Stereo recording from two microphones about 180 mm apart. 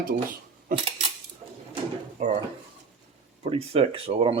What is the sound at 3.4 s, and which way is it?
Speech, 35° right (ahead or behind).